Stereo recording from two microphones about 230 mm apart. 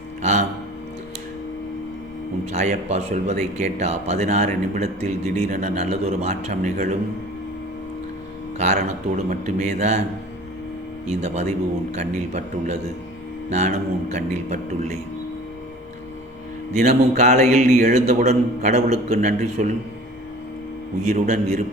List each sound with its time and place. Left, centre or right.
0.2 s music: right
2.5 s speech: right
8.5 s a man's voice: right
11.0 s a man's voice: right
16.7 s a man's voice: right
21.1 s speech: right